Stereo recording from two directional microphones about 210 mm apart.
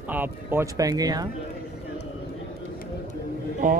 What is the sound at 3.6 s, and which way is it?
Speech, 40° right (ahead or behind).